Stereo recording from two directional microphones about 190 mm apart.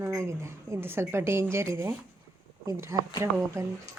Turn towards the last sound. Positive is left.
turn(degrees=-15)  # may be behind; listen again after turning